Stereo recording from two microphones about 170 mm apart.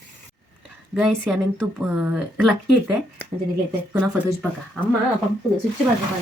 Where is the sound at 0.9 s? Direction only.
Centre (ahead or behind).